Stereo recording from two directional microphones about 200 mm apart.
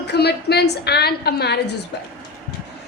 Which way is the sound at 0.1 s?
55° left (ahead or behind).